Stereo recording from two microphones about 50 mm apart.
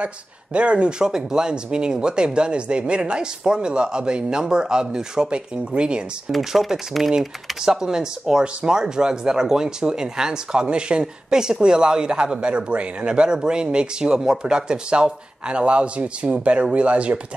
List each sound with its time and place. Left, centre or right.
0.0 s speech: right
6.3 s speech: centre; by 17.4 s right